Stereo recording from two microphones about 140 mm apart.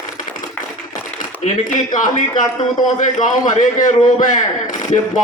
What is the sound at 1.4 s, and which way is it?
A man's voice, 65° left (ahead or behind).